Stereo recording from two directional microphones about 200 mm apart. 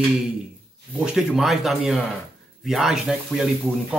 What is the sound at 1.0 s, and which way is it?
Speech, 5° right (ahead or behind).